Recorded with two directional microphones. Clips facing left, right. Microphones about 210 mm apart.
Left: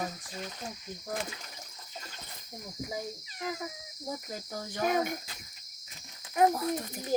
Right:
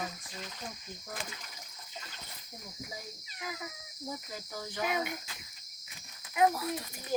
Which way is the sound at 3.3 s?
40° left (ahead or behind).